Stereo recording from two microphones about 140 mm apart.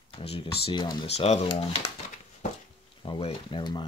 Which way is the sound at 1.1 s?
50° left (ahead or behind).